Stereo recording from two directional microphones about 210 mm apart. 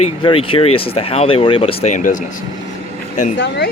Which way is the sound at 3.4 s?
55° left (ahead or behind).